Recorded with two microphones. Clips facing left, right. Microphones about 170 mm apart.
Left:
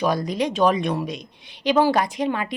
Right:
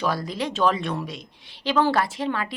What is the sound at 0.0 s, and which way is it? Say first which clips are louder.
A woman's voice: left 4 dB; 15° left (ahead or behind).